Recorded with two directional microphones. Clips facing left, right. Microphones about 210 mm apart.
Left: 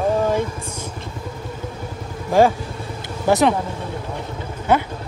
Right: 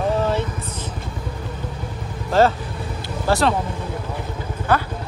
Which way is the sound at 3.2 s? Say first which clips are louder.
Left 3 dB; 15° left (ahead or behind).